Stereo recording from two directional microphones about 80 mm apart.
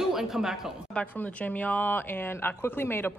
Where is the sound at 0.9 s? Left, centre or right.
Centre.